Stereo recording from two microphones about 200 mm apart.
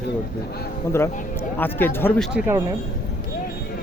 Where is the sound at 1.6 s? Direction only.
10° left (ahead or behind).